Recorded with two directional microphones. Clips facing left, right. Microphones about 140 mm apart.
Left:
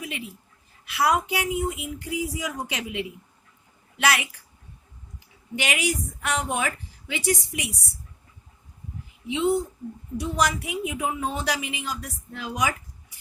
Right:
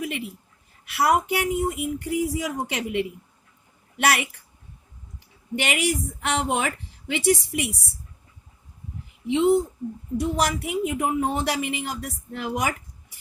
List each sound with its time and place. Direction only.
0.0 s a woman's voice: 55° right (ahead or behind)
5.5 s speech: 60° right (ahead or behind)
9.2 s speech: 60° right (ahead or behind)